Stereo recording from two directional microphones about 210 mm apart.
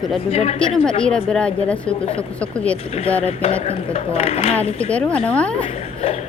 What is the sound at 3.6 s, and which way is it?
Speech, 30° left (ahead or behind).